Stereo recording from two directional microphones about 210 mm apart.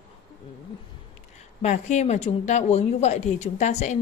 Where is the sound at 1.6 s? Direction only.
35° left (ahead or behind).